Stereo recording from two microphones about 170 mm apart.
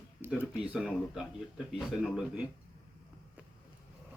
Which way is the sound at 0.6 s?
5° right (ahead or behind).